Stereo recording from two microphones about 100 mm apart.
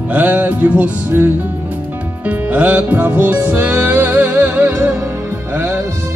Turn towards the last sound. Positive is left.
turn(degrees=-20)  # may be behind; listen again after turning